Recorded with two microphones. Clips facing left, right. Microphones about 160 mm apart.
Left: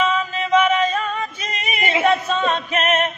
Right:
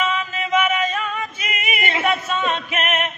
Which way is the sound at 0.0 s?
40° left (ahead or behind).